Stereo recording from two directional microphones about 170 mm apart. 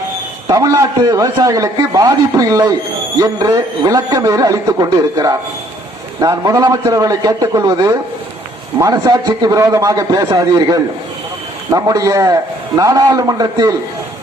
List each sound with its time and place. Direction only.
0.4 s a man's voice: 20° right (ahead or behind)